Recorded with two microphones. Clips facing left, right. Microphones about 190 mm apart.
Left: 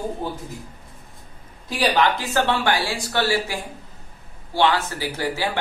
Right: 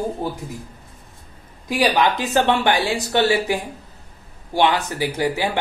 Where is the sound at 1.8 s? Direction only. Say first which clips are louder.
Right 2 dB; 15° right (ahead or behind).